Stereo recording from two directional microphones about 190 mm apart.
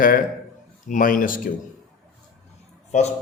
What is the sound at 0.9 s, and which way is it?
Speech, 45° left (ahead or behind).